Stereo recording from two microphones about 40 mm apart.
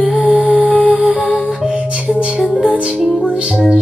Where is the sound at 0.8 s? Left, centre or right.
Right.